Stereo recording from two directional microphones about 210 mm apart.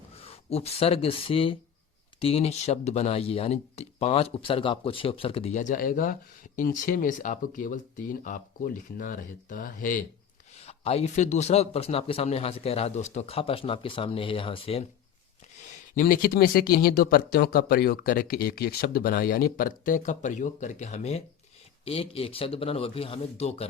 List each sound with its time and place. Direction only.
0.2 s speech: 30° left (ahead or behind)
10.7 s speech: 30° left (ahead or behind)
16.0 s speech: 40° left (ahead or behind)